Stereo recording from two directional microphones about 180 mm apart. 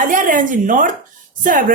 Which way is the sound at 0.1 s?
45° right (ahead or behind).